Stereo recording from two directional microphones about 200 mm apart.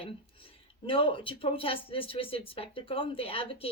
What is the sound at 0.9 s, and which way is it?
Speech, 25° left (ahead or behind).